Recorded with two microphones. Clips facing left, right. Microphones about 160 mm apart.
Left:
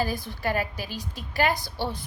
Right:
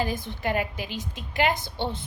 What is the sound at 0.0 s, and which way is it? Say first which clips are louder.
A woman's voice: even; 20° right (ahead or behind).